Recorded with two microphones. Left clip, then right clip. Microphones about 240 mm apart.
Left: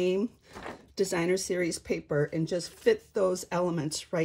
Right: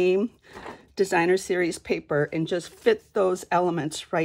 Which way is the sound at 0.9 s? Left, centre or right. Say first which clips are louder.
Right 7 dB; centre.